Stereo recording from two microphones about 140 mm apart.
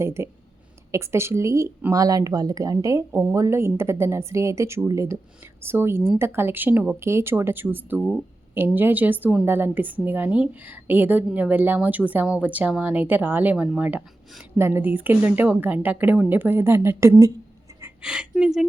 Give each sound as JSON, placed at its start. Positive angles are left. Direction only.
{"t": 0.0, "sound": "a woman's voice", "side_deg": -20}
{"t": 18.0, "sound": "speech", "side_deg": -5}